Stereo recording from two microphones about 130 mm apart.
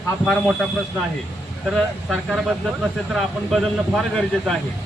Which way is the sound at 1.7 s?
Centre (ahead or behind).